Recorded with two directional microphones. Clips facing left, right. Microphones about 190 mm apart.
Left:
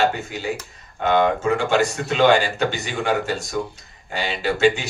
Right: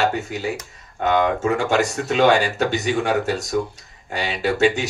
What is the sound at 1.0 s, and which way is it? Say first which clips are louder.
Speech: even; 40° right (ahead or behind).